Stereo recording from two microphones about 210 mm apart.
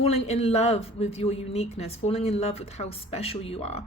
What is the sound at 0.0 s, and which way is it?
Speech, 30° left (ahead or behind).